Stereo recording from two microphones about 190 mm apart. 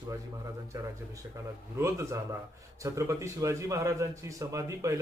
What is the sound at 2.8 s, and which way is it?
A man's voice, 15° right (ahead or behind).